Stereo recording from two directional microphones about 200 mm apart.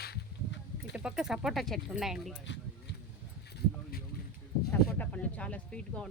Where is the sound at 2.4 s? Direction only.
65° left (ahead or behind).